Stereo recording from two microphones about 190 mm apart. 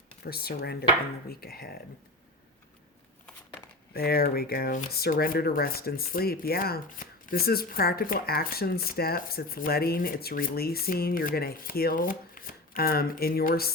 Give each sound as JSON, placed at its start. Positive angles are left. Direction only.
{"t": 0.3, "sound": "speech", "side_deg": 55}
{"t": 3.9, "sound": "speech", "side_deg": 55}